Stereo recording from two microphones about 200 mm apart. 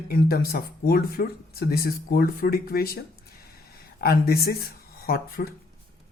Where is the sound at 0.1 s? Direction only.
50° left (ahead or behind).